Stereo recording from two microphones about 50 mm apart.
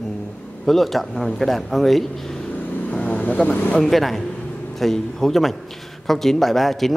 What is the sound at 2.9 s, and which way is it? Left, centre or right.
Vehicle, left.